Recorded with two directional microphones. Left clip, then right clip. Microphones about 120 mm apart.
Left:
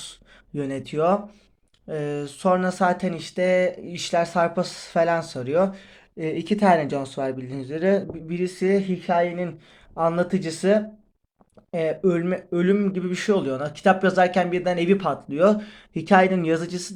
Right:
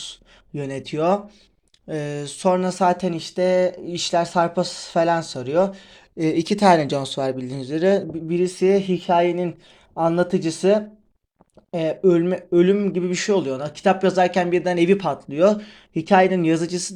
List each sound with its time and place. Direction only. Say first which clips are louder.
0.0 s a sound: right 5 dB; 30° right (ahead or behind)
1.9 s speech: even; 50° right (ahead or behind); by 5.8 s 35° right (ahead or behind)
6.1 s speech: right 4 dB; 75° right (ahead or behind); by 9.0 s 45° right (ahead or behind)
9.9 s speech: right 3 dB; 35° right (ahead or behind)